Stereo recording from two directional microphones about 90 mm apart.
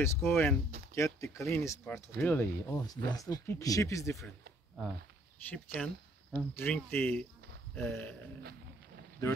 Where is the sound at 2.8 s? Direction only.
40° left (ahead or behind).